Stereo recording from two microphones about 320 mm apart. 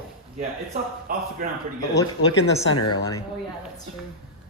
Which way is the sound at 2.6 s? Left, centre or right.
Left.